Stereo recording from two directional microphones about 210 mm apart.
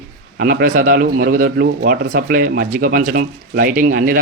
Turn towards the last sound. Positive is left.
turn(degrees=-40)  # may be behind; listen again after turning